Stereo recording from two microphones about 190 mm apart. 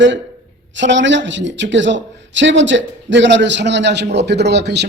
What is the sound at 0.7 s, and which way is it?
A woman's voice, 75° right (ahead or behind).